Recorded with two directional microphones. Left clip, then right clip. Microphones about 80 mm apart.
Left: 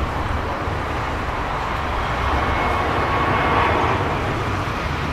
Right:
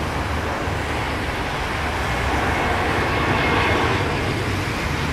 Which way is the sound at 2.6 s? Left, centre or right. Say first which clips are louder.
Left 1 dB; right.